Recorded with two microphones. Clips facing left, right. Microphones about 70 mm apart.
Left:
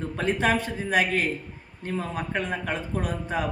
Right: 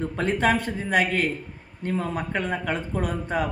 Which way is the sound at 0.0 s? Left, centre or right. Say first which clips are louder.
Right 2 dB; right.